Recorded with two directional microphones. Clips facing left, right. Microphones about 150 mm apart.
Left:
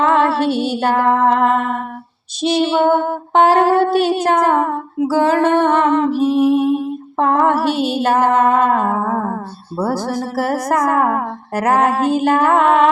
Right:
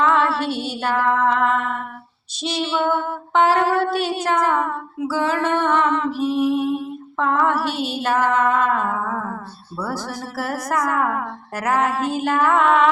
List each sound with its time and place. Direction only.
0.0 s music: 50° left (ahead or behind)